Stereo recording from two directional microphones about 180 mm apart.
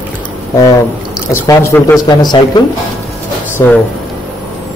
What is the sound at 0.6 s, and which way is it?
Speech, 20° left (ahead or behind).